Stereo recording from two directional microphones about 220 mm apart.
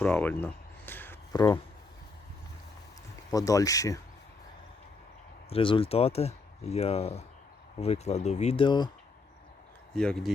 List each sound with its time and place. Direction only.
0.0 s a sound: 10° left (ahead or behind)
3.3 s speech: 15° left (ahead or behind)
5.5 s speech: 25° left (ahead or behind)
9.9 s speech: 5° left (ahead or behind)